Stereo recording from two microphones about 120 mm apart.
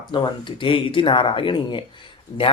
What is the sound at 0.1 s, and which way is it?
A man's voice, 40° left (ahead or behind).